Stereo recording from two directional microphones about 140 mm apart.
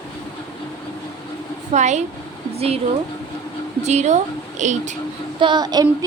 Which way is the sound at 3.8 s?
55° right (ahead or behind).